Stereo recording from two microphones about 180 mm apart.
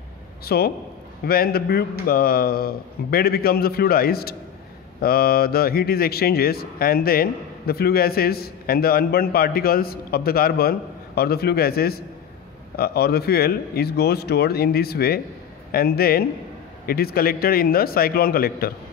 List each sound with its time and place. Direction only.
0.5 s speech: 60° left (ahead or behind)